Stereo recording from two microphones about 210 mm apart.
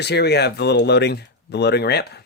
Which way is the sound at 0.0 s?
50° left (ahead or behind).